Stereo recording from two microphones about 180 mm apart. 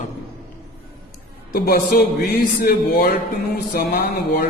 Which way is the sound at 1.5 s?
55° left (ahead or behind).